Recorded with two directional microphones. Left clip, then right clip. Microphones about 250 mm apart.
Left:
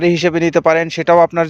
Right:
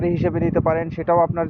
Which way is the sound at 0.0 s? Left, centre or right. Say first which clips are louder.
Left 8 dB; left.